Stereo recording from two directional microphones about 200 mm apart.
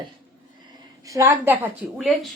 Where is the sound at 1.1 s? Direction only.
15° right (ahead or behind).